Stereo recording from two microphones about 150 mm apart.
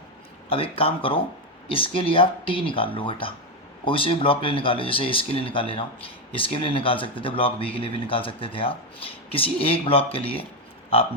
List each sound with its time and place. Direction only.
0.5 s speech: 40° left (ahead or behind)